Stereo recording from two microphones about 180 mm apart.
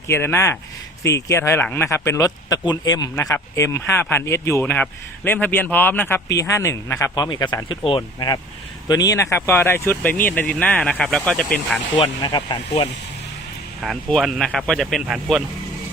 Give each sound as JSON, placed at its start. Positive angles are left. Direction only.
{"t": 0.1, "sound": "speech", "side_deg": 15}
{"t": 11.9, "sound": "speech", "side_deg": 25}
{"t": 13.8, "sound": "speech", "side_deg": 0}